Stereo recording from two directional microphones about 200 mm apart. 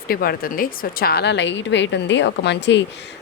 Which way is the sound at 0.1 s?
50° left (ahead or behind).